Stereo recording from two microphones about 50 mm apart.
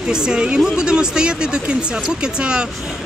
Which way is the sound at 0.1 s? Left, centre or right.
Centre.